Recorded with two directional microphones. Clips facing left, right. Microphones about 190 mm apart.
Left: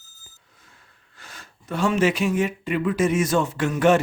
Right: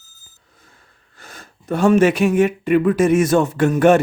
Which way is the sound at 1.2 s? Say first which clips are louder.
Right 4 dB; 50° right (ahead or behind).